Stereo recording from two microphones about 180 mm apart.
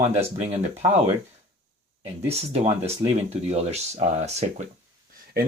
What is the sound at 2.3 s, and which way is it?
Speech, 35° right (ahead or behind).